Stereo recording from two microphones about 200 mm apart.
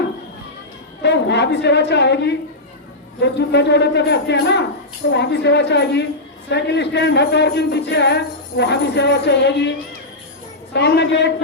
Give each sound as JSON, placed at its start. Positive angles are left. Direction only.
{"t": 1.0, "sound": "a woman's voice", "side_deg": 60}
{"t": 10.8, "sound": "a man's voice", "side_deg": 60}